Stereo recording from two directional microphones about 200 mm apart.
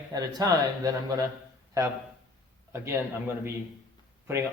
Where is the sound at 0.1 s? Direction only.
20° right (ahead or behind).